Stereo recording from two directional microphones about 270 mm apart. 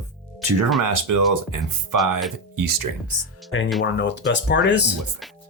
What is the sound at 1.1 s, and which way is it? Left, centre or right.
Speech, right.